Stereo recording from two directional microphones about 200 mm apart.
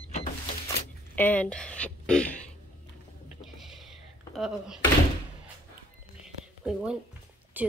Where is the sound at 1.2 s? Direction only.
10° left (ahead or behind).